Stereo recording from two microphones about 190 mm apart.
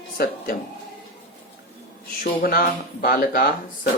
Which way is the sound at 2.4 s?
50° left (ahead or behind).